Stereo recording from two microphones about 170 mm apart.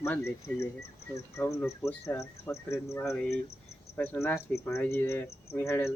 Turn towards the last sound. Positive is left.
turn(degrees=15)  # may be behind; listen again after turning